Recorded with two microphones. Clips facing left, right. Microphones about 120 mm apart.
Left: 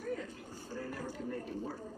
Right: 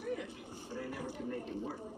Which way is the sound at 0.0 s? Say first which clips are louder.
Even; 15° right (ahead or behind).